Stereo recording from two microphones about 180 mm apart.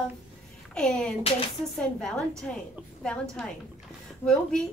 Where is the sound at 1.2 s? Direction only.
35° left (ahead or behind).